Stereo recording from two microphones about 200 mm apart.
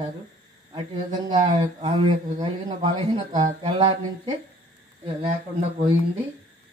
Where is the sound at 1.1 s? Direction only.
25° right (ahead or behind).